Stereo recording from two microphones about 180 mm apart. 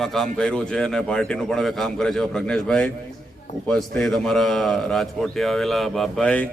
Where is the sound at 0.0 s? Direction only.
Centre (ahead or behind).